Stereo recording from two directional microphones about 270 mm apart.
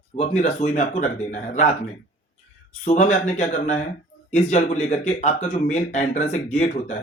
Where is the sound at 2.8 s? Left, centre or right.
Left.